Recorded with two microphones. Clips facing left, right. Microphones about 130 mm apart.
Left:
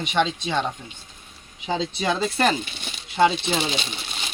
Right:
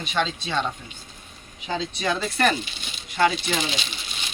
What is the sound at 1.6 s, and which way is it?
Speech, 25° left (ahead or behind).